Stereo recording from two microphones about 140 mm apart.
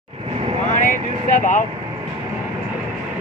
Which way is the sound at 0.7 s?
65° left (ahead or behind).